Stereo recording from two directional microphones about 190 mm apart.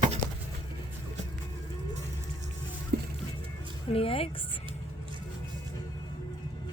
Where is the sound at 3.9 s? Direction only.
30° left (ahead or behind).